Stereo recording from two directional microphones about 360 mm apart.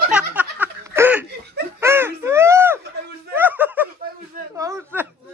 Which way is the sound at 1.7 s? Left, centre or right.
Centre.